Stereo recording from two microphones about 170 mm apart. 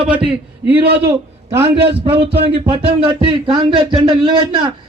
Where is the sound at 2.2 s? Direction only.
35° right (ahead or behind).